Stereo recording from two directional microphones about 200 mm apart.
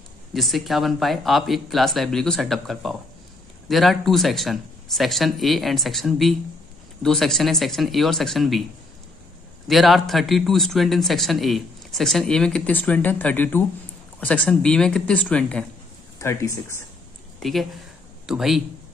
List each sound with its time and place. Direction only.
0.3 s speech: centre (ahead or behind)
9.7 s speech: centre (ahead or behind)
17.4 s speech: centre (ahead or behind)